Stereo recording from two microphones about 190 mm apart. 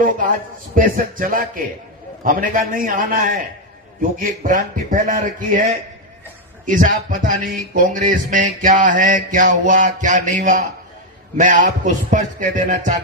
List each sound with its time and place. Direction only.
0.0 s speech: 45° right (ahead or behind)
11.9 s music: 40° right (ahead or behind)